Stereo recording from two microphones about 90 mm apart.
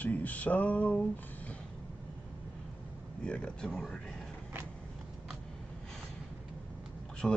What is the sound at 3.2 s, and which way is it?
Speech, 10° left (ahead or behind).